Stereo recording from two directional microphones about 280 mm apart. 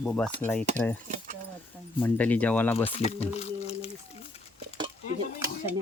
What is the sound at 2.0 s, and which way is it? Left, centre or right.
Speech, centre.